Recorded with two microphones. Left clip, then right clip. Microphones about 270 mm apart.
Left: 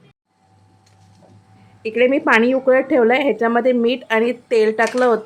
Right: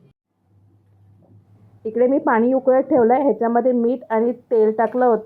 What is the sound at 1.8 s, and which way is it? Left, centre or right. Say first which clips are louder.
A woman's voice: left 2 dB; centre.